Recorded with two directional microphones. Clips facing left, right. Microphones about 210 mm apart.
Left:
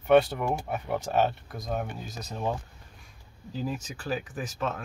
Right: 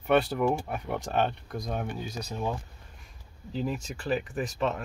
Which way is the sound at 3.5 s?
Centre (ahead or behind).